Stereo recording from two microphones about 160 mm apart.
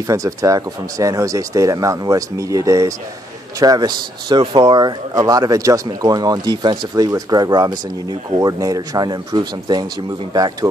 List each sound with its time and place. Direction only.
0.0 s speech: 20° right (ahead or behind)